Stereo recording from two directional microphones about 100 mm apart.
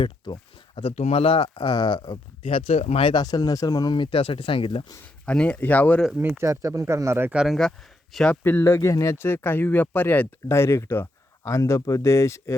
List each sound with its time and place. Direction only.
0.8 s speech: 90° left
1.3 s speech: 50° left (ahead or behind); by 3.1 s 80° left
3.1 s speech: 45° left (ahead or behind); by 4.9 s 60° left (ahead or behind)
5.2 s speech: 10° left (ahead or behind)
6.1 s speech: 25° right (ahead or behind)
7.3 s speech: centre (ahead or behind)
8.4 s speech: 20° left (ahead or behind)